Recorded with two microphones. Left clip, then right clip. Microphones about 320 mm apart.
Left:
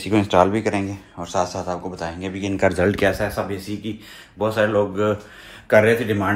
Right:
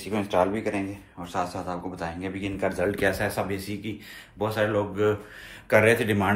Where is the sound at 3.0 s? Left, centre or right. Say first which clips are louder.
Left 5 dB; centre.